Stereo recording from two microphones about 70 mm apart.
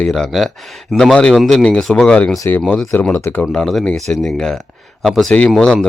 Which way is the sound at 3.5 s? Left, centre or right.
Centre.